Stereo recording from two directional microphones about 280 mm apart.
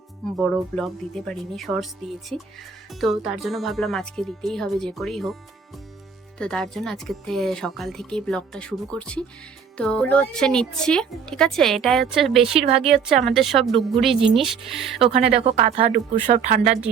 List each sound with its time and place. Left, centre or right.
0.3 s speech: centre
6.4 s speech: centre
15.4 s speech: right